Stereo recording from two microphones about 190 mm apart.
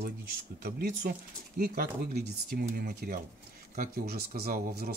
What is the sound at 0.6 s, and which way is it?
Speech, 50° right (ahead or behind).